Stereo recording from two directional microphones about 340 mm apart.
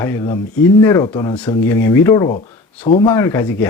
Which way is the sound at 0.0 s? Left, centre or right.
Centre.